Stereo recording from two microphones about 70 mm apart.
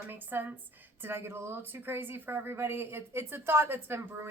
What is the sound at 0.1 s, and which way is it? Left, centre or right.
A woman's voice, right.